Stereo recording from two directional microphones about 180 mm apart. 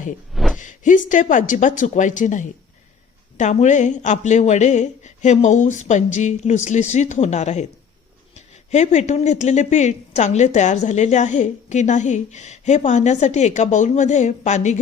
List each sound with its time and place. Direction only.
0.3 s a sound: centre (ahead or behind)
0.6 s a woman's voice: 45° left (ahead or behind)
8.7 s a woman's voice: 40° left (ahead or behind)